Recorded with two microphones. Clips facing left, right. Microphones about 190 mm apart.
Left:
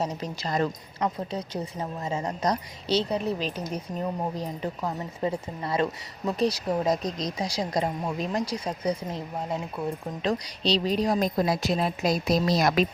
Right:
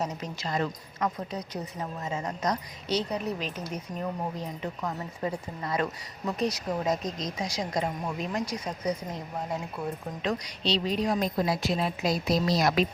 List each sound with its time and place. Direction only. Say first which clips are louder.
0.0 s speech: left 3 dB; 35° left (ahead or behind)
1.0 s a woman's voice: left 2 dB; 25° left (ahead or behind); by 12.8 s 50° left (ahead or behind)